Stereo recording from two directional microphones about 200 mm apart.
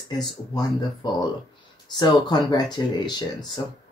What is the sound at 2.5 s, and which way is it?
Speech, 20° left (ahead or behind).